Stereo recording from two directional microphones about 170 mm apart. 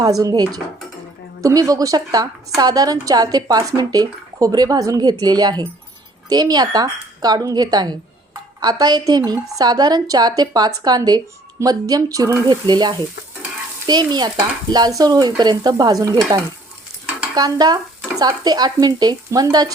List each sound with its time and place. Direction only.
0.0 s a woman's voice: 20° right (ahead or behind)